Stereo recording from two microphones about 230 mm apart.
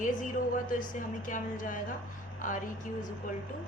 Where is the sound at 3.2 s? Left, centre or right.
Left.